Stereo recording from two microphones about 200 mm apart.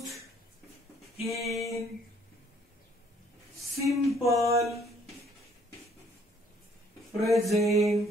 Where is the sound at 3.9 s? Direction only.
Centre (ahead or behind).